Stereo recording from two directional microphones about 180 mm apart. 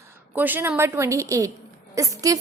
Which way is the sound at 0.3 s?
10° right (ahead or behind).